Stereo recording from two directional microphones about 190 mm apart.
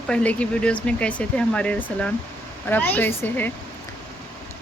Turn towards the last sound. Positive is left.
turn(degrees=10)  # may be behind; listen again after turning